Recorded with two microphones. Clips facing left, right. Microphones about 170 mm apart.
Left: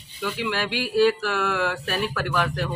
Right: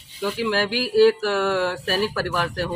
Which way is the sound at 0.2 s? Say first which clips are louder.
Right 4 dB; 30° right (ahead or behind).